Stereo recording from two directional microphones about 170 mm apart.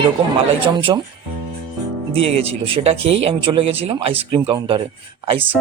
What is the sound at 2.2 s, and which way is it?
Speech, 35° right (ahead or behind).